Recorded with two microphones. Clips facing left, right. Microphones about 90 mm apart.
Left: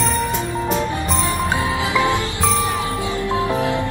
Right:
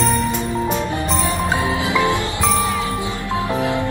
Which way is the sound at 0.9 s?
25° right (ahead or behind).